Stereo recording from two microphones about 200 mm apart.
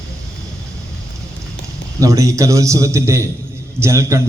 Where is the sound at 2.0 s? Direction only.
15° right (ahead or behind).